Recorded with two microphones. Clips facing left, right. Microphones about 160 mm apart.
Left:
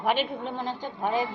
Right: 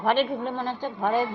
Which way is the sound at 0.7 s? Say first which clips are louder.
Right 3 dB; 50° right (ahead or behind).